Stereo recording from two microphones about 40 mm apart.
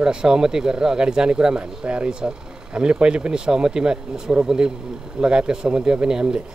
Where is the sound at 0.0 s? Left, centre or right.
Centre.